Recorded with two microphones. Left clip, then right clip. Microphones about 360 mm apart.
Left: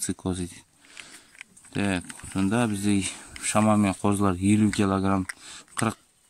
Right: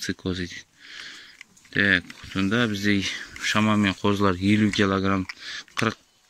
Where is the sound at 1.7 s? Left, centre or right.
Centre.